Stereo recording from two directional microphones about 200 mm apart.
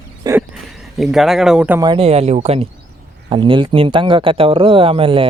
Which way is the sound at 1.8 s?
25° right (ahead or behind).